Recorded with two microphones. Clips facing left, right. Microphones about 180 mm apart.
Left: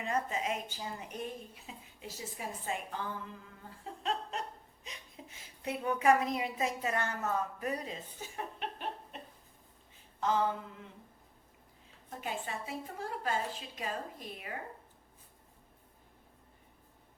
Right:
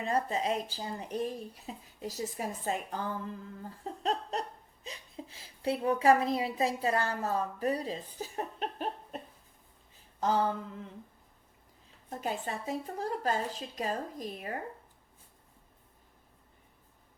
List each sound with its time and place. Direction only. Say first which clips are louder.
0.0 s speech: right 4 dB; 35° right (ahead or behind)
3.7 s laughter: right 4 dB; 40° right (ahead or behind)
10.2 s a sound: right 2 dB; 40° right (ahead or behind)
12.1 s speech: right 4 dB; 40° right (ahead or behind)